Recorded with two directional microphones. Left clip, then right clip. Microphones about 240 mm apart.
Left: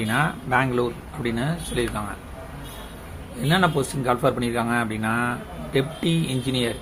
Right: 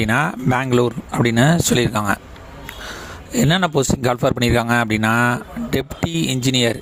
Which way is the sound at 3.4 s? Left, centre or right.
Right.